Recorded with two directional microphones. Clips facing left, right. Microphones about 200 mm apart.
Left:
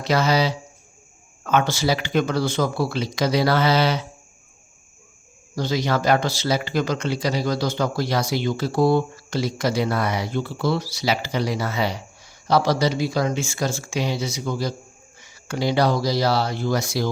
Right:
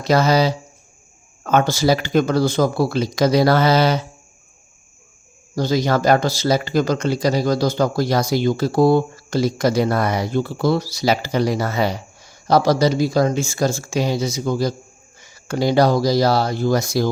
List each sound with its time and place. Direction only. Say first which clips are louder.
0.0 s speech: right 4 dB; 40° right (ahead or behind)
5.5 s speech: right 4 dB; 40° right (ahead or behind)